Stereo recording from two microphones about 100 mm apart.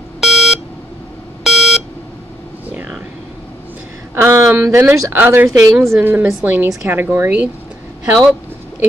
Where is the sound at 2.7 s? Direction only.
10° right (ahead or behind).